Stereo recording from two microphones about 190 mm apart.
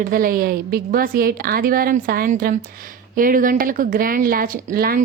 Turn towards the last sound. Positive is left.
turn(degrees=-50)  # may be behind; listen again after turning